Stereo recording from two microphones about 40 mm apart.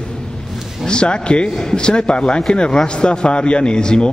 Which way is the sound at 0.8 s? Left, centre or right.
Left.